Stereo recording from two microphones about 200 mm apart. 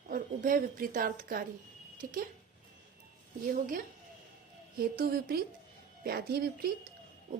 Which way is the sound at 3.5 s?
45° right (ahead or behind).